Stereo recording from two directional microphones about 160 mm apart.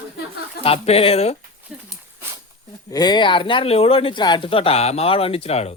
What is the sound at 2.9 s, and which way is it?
Speech, 25° left (ahead or behind).